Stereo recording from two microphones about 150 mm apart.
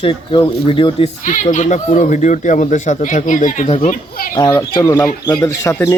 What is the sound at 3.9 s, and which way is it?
Speech, 70° left (ahead or behind).